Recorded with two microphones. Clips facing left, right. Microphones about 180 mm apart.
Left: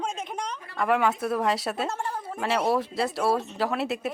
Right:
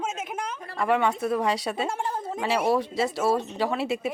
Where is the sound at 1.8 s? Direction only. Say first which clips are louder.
Right 2 dB; 15° right (ahead or behind).